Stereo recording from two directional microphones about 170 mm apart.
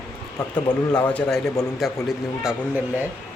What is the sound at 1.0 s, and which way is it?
Speech, 10° left (ahead or behind).